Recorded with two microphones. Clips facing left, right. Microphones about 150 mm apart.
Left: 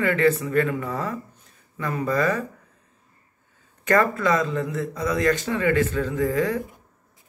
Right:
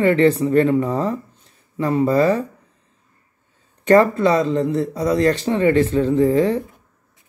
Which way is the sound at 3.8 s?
30° right (ahead or behind).